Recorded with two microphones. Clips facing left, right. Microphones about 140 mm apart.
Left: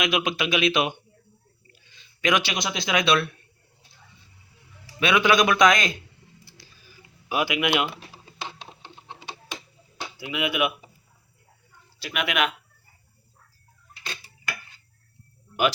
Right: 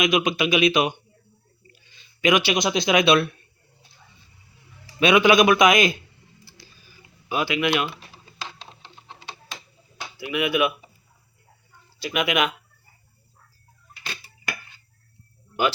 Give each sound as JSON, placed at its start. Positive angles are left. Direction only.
{"t": 0.0, "sound": "speech", "side_deg": 0}
{"t": 2.2, "sound": "speech", "side_deg": -5}
{"t": 2.5, "sound": "a man's voice", "side_deg": -20}
{"t": 4.9, "sound": "a man's voice", "side_deg": -15}
{"t": 7.3, "sound": "speech", "side_deg": 15}
{"t": 10.2, "sound": "speech", "side_deg": 20}
{"t": 12.0, "sound": "speech", "side_deg": 0}